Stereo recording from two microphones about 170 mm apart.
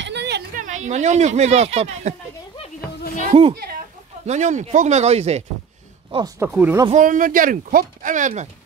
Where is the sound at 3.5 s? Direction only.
65° right (ahead or behind).